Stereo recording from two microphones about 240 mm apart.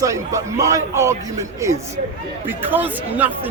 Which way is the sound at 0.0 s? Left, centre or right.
Centre.